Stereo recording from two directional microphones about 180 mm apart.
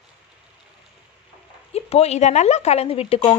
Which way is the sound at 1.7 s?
35° left (ahead or behind).